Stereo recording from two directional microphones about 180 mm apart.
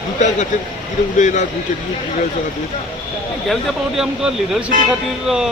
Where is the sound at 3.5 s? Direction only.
Centre (ahead or behind).